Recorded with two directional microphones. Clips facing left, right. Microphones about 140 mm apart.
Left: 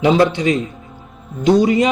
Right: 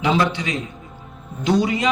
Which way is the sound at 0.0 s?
45° left (ahead or behind).